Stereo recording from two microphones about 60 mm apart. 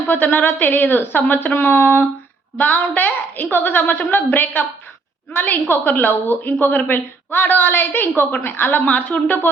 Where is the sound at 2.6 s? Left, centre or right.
Left.